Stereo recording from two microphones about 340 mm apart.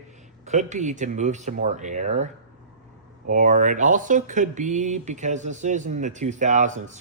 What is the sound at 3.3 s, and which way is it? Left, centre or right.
Speech, right.